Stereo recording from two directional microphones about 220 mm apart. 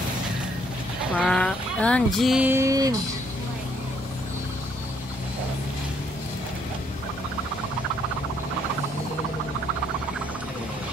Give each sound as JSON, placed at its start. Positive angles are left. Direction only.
{"t": 1.2, "sound": "speech", "side_deg": 5}